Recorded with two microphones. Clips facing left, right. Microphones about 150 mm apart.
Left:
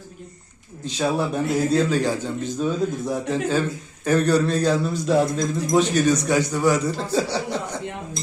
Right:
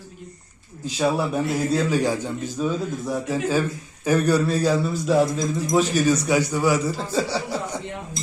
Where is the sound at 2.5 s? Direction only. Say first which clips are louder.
Left 2 dB; centre (ahead or behind).